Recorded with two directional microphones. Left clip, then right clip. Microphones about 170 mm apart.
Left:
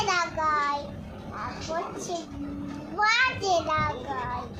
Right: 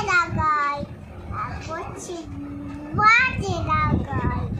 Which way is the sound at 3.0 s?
Centre (ahead or behind).